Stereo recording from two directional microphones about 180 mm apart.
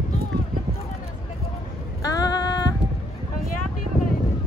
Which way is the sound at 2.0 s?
20° left (ahead or behind).